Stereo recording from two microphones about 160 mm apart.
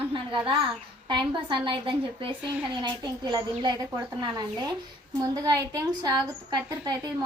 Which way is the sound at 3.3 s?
25° right (ahead or behind).